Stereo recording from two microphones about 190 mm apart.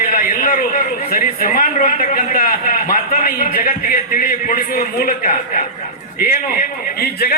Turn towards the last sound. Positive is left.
turn(degrees=55)  # may be behind; listen again after turning